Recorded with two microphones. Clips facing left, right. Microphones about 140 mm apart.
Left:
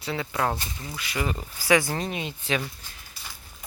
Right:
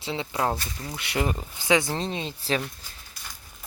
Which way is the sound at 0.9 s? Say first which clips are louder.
Right 3 dB; 65° right (ahead or behind).